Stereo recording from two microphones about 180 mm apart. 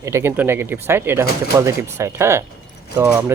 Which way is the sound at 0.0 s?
15° right (ahead or behind).